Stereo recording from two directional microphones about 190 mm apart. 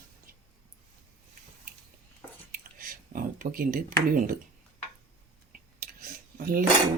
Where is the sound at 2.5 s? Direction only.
50° right (ahead or behind).